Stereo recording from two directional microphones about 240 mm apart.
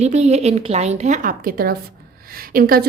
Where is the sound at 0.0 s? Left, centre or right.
Right.